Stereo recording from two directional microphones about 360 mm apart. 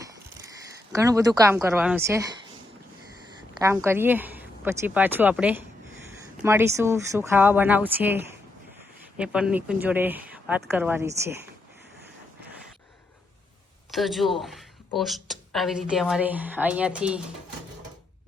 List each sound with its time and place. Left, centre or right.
0.0 s a sound: centre
0.9 s a woman's voice: centre
3.6 s speech: centre
13.9 s a woman's voice: centre